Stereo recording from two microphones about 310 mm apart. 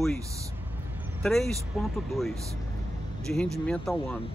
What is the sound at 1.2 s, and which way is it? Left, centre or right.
Speech, centre.